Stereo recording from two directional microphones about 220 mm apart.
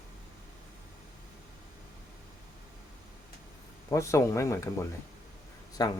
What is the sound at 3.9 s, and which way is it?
Speech, 15° left (ahead or behind).